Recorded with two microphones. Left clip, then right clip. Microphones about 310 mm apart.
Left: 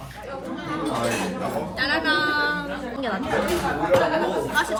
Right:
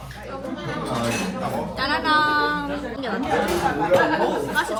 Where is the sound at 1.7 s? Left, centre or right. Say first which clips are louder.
Right 2 dB; centre.